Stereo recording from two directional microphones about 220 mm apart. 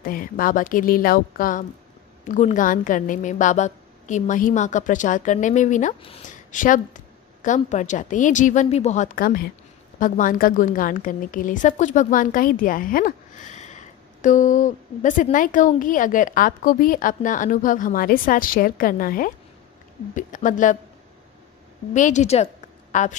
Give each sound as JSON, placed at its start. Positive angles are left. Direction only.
{"t": 0.0, "sound": "a woman's voice", "side_deg": 40}
{"t": 21.9, "sound": "a woman's voice", "side_deg": 35}